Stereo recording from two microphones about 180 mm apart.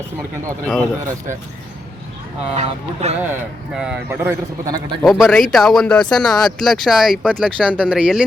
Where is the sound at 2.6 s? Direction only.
35° right (ahead or behind).